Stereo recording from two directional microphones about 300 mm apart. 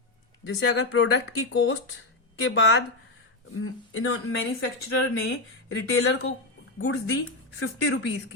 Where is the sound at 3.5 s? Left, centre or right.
Left.